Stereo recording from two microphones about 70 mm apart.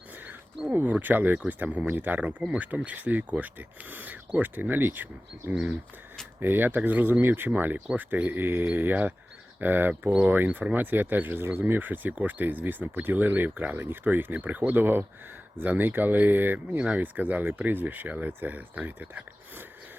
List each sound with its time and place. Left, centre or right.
0.7 s speech: right
16.7 s speech: centre